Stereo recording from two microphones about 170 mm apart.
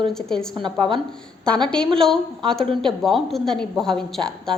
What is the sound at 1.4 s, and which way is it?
A woman's voice, 5° left (ahead or behind).